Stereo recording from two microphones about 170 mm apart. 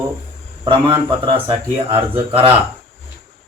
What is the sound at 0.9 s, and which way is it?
Speech, 30° right (ahead or behind).